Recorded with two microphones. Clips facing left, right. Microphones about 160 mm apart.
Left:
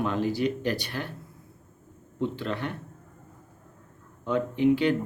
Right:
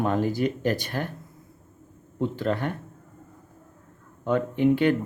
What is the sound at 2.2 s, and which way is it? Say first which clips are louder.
Speech: right 4 dB; 45° right (ahead or behind).